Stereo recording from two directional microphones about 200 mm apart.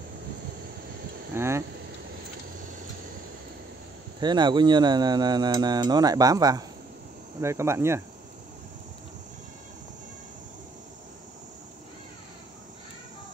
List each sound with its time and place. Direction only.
1.3 s vehicle: 10° right (ahead or behind)
4.2 s speech: 20° right (ahead or behind)